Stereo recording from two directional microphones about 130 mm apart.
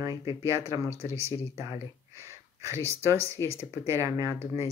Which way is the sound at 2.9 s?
20° right (ahead or behind).